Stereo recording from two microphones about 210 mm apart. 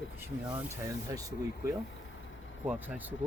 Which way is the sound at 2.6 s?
10° right (ahead or behind).